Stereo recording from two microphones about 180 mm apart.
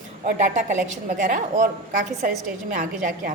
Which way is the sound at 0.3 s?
45° right (ahead or behind).